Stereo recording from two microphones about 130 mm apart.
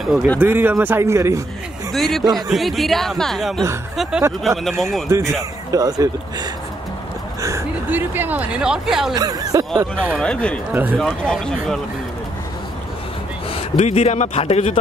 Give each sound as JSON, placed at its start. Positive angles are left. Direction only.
{"t": 0.0, "sound": "speech", "side_deg": 0}
{"t": 0.4, "sound": "speech", "side_deg": -15}
{"t": 1.9, "sound": "speech", "side_deg": 0}
{"t": 5.1, "sound": "speech", "side_deg": -25}
{"t": 7.4, "sound": "speech", "side_deg": -20}
{"t": 9.1, "sound": "speech", "side_deg": -30}
{"t": 10.2, "sound": "speech", "side_deg": 10}
{"t": 10.7, "sound": "speech", "side_deg": -15}
{"t": 11.0, "sound": "speech", "side_deg": 5}
{"t": 13.6, "sound": "a man's voice", "side_deg": 55}